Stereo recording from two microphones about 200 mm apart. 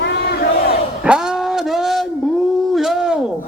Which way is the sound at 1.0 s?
5° right (ahead or behind).